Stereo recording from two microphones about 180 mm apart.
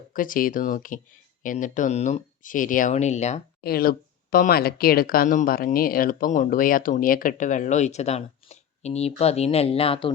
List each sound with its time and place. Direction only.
0.1 s speech: 50° left (ahead or behind)
3.6 s speech: 55° left (ahead or behind); by 10.1 s 30° left (ahead or behind)